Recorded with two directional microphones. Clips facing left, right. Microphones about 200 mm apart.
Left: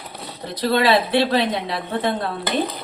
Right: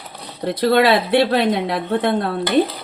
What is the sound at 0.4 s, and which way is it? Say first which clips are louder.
Speech: right 4 dB; 60° right (ahead or behind).